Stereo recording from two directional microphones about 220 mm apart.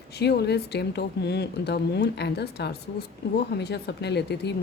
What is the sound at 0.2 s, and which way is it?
Speech, 50° left (ahead or behind).